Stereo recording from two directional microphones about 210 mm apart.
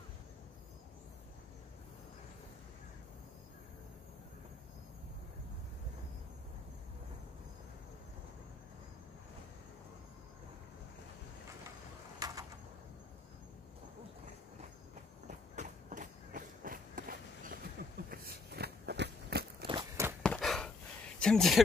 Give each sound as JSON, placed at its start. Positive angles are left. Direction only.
{"t": 12.2, "sound": "a sound", "side_deg": -15}
{"t": 15.2, "sound": "run", "side_deg": -35}
{"t": 17.8, "sound": "vehicle", "side_deg": -45}
{"t": 18.1, "sound": "biting", "side_deg": -45}
{"t": 19.7, "sound": "walk", "side_deg": -15}
{"t": 20.2, "sound": "chopping", "side_deg": 0}
{"t": 21.2, "sound": "speech", "side_deg": 0}